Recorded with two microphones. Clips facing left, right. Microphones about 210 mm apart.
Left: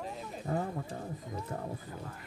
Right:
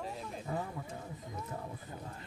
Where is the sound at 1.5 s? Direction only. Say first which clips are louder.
Left 4 dB; 45° left (ahead or behind).